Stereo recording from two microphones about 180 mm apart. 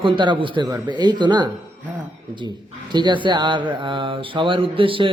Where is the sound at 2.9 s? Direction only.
25° right (ahead or behind).